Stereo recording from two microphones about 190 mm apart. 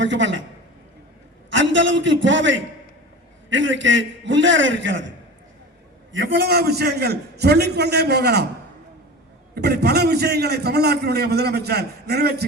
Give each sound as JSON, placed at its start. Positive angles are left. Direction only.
{"t": 0.0, "sound": "a man's voice", "side_deg": -75}
{"t": 1.5, "sound": "a man's voice", "side_deg": -80}
{"t": 6.3, "sound": "a man's voice", "side_deg": -55}
{"t": 9.6, "sound": "a man's voice", "side_deg": -60}